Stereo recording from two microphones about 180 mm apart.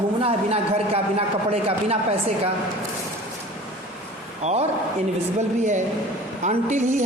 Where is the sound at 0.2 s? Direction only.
35° right (ahead or behind).